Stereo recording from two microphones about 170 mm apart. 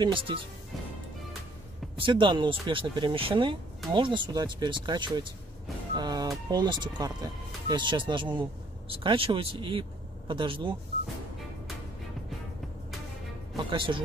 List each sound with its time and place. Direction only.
0.0 s speech: 30° right (ahead or behind)
2.0 s speech: 30° right (ahead or behind)
13.7 s speech: 30° right (ahead or behind)